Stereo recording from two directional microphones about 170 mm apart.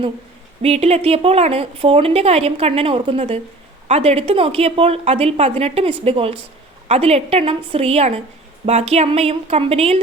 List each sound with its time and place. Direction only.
0.6 s a woman's voice: 40° right (ahead or behind)